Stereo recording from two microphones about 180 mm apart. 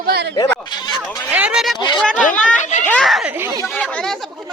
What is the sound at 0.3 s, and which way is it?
Goat, 25° left (ahead or behind).